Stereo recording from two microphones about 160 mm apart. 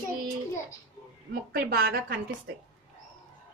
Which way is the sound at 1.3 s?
65° right (ahead or behind).